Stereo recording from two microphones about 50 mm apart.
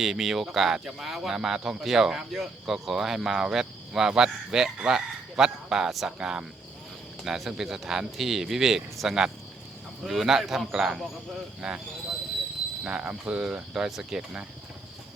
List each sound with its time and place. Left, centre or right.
0.0 s speech: centre
12.8 s speech: right